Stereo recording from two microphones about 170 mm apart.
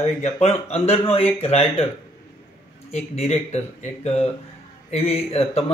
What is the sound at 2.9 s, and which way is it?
Speech, 40° left (ahead or behind).